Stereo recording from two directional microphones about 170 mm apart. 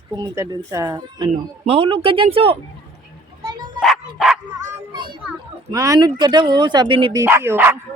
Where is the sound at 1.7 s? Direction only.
35° right (ahead or behind).